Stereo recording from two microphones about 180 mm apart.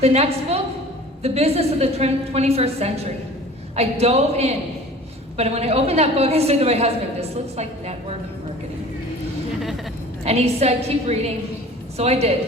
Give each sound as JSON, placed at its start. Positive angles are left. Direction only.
{"t": 0.0, "sound": "a woman's voice", "side_deg": -35}
{"t": 9.6, "sound": "vehicle", "side_deg": 0}
{"t": 10.2, "sound": "a woman's voice", "side_deg": -35}